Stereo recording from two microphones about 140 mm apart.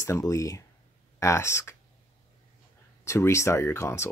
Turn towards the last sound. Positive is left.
turn(degrees=20)  # may be behind; listen again after turning